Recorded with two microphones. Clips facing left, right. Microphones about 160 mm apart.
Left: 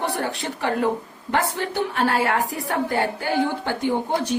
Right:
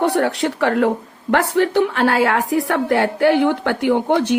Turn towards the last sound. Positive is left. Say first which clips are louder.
# right 7 dB
turn(degrees=-75)  # may be behind; listen again after turning